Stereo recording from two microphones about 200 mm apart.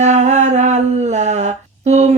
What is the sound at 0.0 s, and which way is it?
Mantra, 35° right (ahead or behind).